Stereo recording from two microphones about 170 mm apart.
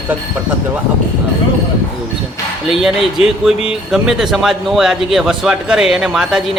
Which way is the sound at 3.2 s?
35° left (ahead or behind).